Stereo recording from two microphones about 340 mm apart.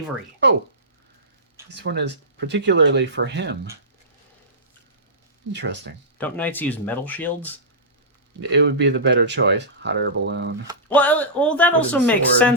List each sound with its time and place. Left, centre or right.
1.7 s speech: right
5.5 s speech: right
6.1 s speech: centre
8.4 s speech: right
10.8 s speech: centre